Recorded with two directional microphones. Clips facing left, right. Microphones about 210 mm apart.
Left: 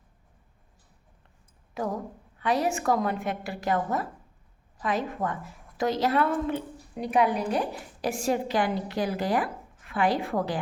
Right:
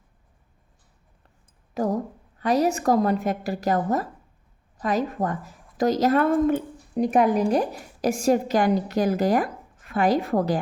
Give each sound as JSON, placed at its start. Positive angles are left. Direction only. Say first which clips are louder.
{"t": 2.4, "sound": "a woman's voice", "louder": "right 5 dB", "side_deg": -40}